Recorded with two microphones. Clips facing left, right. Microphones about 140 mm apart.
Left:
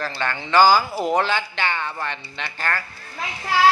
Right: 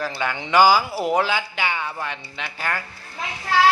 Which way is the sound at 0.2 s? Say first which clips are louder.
Even; 10° right (ahead or behind).